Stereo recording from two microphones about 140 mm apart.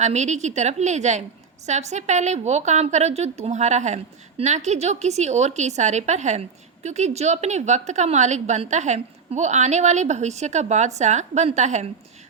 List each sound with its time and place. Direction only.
0.0 s a woman's voice: 55° right (ahead or behind)